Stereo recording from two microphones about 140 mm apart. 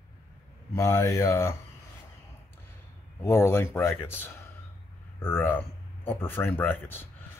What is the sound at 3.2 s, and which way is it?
Speech, 20° left (ahead or behind).